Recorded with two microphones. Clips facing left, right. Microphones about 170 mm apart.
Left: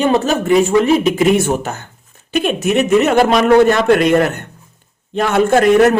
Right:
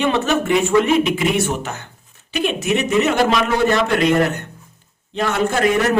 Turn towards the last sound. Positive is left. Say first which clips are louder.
# left 6 dB
turn(degrees=50)  # may be behind; listen again after turning